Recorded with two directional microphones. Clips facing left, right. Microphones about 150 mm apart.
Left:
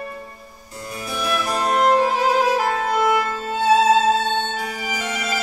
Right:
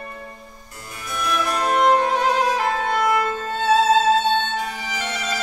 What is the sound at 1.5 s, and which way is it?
Music, 30° left (ahead or behind).